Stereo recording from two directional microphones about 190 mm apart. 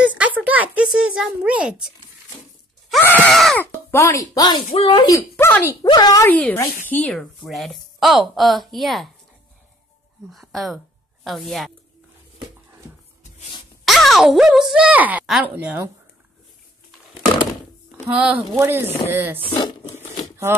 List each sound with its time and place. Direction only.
0.1 s a sound: 10° right (ahead or behind)
3.0 s speech: 10° left (ahead or behind)
5.3 s speech: 10° left (ahead or behind)
10.3 s speech: centre (ahead or behind)
13.8 s speech: centre (ahead or behind)
18.0 s speech: 5° right (ahead or behind)
19.5 s crumpling: 20° left (ahead or behind)